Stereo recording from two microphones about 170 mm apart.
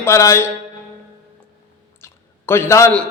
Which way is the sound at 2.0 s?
15° left (ahead or behind).